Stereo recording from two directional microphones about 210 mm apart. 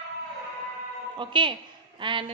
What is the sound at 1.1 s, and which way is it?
A woman's voice, 20° right (ahead or behind).